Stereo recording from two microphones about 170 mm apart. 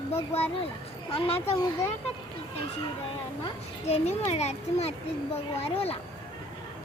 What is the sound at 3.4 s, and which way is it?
A child's voice, 35° left (ahead or behind).